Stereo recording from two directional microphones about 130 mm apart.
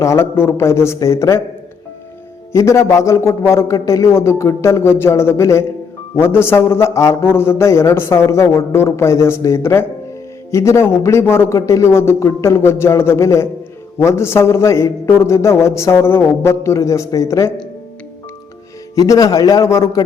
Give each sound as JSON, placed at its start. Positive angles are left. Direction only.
{"t": 0.0, "sound": "a man's voice", "side_deg": 20}
{"t": 2.5, "sound": "a man's voice", "side_deg": 20}
{"t": 18.9, "sound": "a man's voice", "side_deg": 25}